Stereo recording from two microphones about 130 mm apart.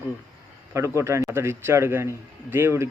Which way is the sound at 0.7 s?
20° right (ahead or behind).